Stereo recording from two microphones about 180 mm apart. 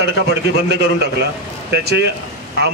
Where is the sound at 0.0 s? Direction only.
65° right (ahead or behind).